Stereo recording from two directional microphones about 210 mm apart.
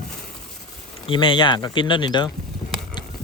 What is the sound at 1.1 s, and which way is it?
Speech, 25° left (ahead or behind).